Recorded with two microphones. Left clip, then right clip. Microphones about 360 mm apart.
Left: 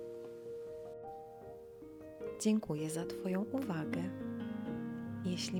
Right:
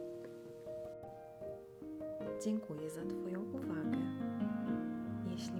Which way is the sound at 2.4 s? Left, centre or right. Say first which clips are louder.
Left 5 dB; centre.